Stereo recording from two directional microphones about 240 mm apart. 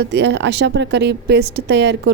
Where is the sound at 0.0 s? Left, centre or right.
Right.